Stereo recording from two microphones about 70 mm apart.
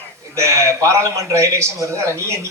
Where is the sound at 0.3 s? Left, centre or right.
Right.